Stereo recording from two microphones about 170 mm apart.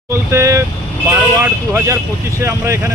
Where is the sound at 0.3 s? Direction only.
15° right (ahead or behind).